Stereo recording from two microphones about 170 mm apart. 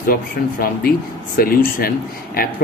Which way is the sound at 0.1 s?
60° left (ahead or behind).